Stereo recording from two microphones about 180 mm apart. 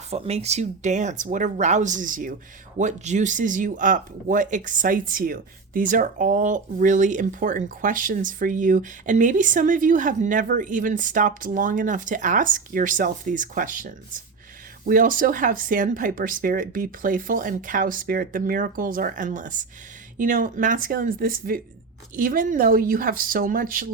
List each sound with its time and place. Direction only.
0.1 s speech: 35° right (ahead or behind); by 23.9 s 50° right (ahead or behind)